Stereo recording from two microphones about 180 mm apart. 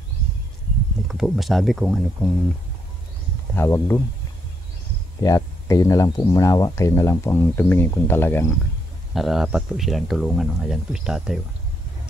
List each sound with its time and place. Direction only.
1.0 s speech: centre (ahead or behind)
3.5 s speech: 15° left (ahead or behind)
5.2 s speech: 20° left (ahead or behind)
9.1 s speech: centre (ahead or behind)